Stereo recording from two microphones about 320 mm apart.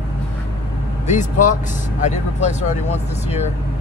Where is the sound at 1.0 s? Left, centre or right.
Left.